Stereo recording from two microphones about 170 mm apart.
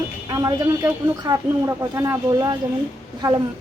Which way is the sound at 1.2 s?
20° right (ahead or behind).